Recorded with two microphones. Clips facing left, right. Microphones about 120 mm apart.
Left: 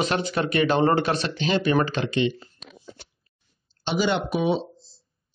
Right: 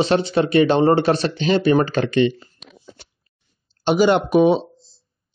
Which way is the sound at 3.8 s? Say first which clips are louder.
Right 8 dB; 45° right (ahead or behind).